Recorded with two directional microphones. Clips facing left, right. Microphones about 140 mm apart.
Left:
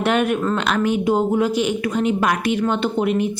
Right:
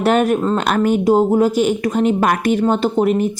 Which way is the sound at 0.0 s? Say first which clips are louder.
Right 4 dB; 40° right (ahead or behind).